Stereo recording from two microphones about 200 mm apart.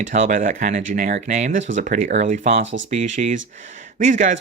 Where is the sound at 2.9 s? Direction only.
35° right (ahead or behind).